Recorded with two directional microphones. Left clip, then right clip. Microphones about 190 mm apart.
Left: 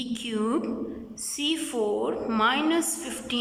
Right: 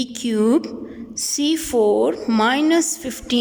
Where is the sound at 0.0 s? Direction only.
40° right (ahead or behind).